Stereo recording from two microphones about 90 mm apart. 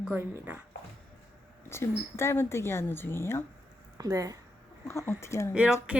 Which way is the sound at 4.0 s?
40° right (ahead or behind).